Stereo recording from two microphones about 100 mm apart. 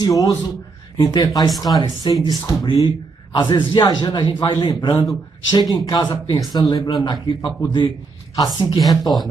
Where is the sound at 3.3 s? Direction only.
50° left (ahead or behind).